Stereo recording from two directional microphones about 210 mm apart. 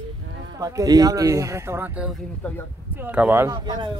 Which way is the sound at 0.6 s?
15° right (ahead or behind).